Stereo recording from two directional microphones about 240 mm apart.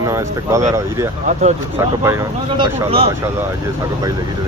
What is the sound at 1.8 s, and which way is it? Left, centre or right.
Speech, centre.